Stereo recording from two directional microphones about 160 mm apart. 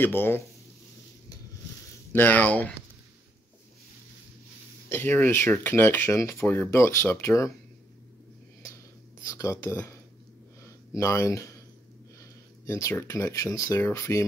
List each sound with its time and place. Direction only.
0.0 s speech: 15° left (ahead or behind)
2.1 s speech: 10° left (ahead or behind)
4.8 s speech: 15° left (ahead or behind)
9.3 s speech: 20° left (ahead or behind)
10.6 s a sound: 20° left (ahead or behind)
12.2 s speech: 20° left (ahead or behind)